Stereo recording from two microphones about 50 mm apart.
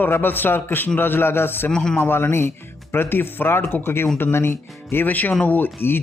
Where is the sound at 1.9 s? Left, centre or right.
Left.